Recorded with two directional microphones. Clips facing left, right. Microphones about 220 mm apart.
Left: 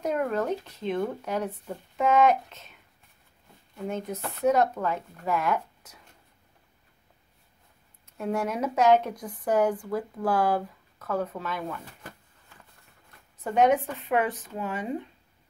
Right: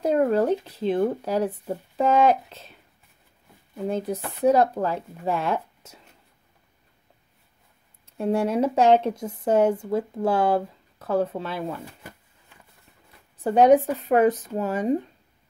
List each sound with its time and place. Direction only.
0.0 s speech: 35° right (ahead or behind)
4.2 s speech: 15° right (ahead or behind)
4.5 s speech: 35° right (ahead or behind)
8.2 s speech: 30° right (ahead or behind)
13.4 s speech: 35° right (ahead or behind)